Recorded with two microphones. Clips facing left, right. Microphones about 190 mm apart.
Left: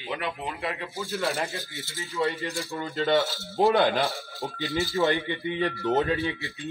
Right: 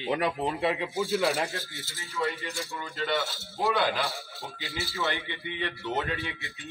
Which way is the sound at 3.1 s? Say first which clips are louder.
Left 7 dB; 20° left (ahead or behind).